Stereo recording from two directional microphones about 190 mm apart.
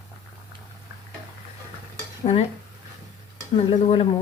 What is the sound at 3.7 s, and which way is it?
Speech, 35° left (ahead or behind).